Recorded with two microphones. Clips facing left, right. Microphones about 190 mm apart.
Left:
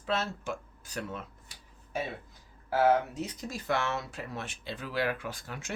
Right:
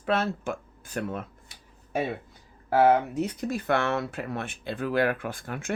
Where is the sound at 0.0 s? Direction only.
60° right (ahead or behind).